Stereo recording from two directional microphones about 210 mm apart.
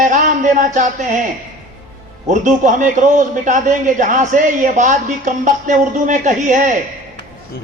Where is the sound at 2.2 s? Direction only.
35° right (ahead or behind).